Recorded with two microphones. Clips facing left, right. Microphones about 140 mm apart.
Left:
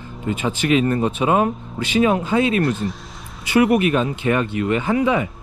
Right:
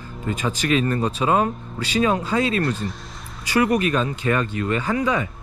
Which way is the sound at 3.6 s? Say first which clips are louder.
Left 3 dB; 20° left (ahead or behind).